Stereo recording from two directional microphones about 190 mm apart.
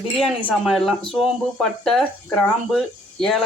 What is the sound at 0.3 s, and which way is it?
Speech, centre (ahead or behind).